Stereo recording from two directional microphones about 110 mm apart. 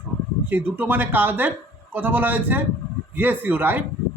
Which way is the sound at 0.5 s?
15° right (ahead or behind).